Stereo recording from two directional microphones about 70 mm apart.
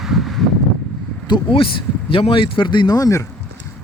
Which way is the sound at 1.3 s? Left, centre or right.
Left.